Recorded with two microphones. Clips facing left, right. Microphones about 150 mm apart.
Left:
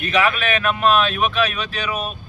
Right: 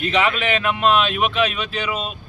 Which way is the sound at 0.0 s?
25° right (ahead or behind).